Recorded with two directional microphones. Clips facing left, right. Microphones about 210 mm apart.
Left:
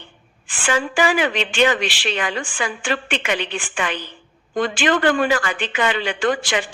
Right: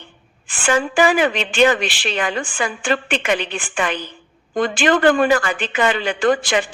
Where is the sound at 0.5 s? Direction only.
45° right (ahead or behind).